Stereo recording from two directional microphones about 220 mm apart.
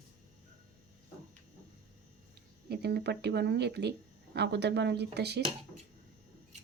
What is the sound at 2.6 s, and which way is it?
Speech, 45° right (ahead or behind).